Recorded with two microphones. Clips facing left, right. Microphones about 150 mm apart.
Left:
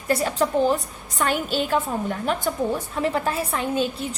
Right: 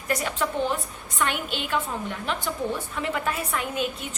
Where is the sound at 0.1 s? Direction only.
35° left (ahead or behind).